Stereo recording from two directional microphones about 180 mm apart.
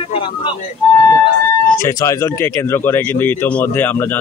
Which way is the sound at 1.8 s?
15° left (ahead or behind).